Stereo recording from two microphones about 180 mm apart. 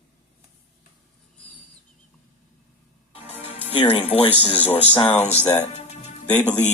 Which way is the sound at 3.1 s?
30° left (ahead or behind).